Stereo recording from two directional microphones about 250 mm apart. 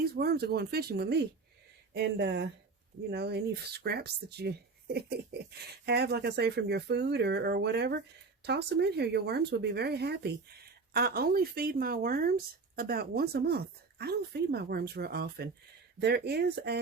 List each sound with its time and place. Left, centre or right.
0.0 s speech: right